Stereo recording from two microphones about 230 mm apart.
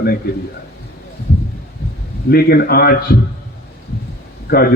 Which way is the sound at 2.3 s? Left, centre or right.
Left.